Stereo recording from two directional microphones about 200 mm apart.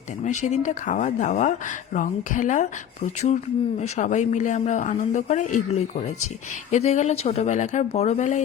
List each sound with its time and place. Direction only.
0.3 s speech: 35° left (ahead or behind)